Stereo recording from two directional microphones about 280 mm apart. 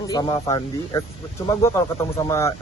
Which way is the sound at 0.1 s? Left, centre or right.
Centre.